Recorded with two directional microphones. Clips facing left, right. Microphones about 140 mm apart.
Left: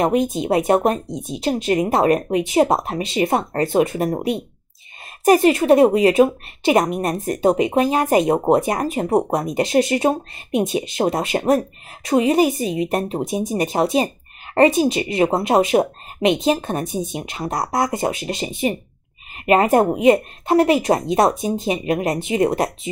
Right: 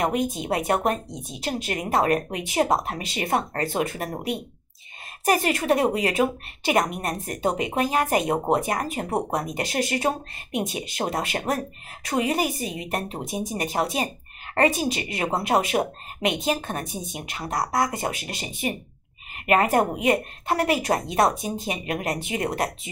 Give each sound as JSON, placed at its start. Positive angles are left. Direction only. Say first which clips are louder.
{"t": 0.0, "sound": "a woman's voice", "louder": "left 6 dB", "side_deg": 25}